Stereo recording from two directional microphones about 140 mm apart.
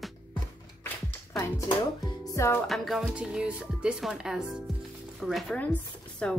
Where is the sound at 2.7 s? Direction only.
Centre (ahead or behind).